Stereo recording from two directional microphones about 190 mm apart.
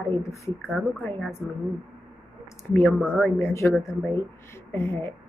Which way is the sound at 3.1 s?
10° left (ahead or behind).